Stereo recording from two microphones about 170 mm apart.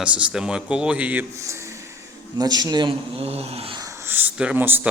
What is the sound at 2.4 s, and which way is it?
Speech, 20° right (ahead or behind).